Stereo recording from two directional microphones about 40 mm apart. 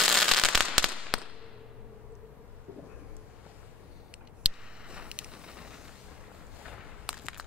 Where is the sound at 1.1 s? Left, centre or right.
Centre.